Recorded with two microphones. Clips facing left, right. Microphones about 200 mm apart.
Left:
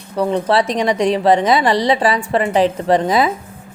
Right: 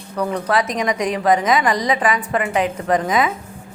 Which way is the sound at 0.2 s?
25° left (ahead or behind).